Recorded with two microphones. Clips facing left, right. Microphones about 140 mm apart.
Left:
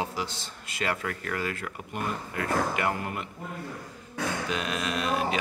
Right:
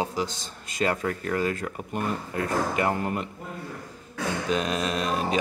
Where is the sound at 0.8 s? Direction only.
30° right (ahead or behind).